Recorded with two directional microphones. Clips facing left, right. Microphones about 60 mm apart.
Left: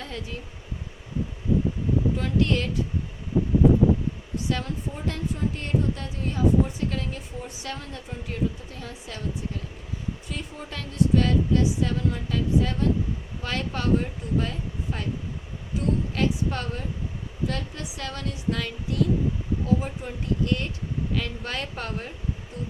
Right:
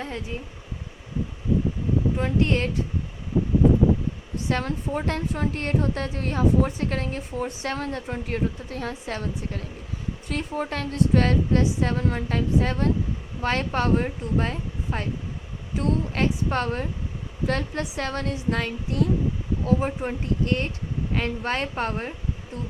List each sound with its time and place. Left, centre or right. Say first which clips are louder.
0.0 s speech: right 3 dB; right
2.1 s speech: right 1 dB; right
4.4 s a woman's voice: right 4 dB; right